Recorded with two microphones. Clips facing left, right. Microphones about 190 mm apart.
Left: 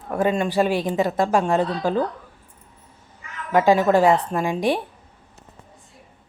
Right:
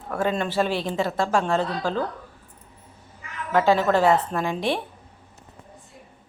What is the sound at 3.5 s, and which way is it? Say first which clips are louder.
Speech: left 3 dB; 15° left (ahead or behind).